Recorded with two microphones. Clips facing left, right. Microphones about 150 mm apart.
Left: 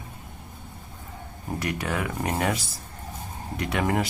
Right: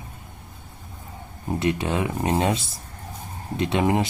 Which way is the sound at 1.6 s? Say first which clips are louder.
Right 5 dB; 25° right (ahead or behind).